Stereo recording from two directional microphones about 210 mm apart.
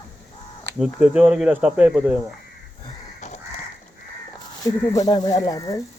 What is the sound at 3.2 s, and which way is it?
Crow, 35° left (ahead or behind).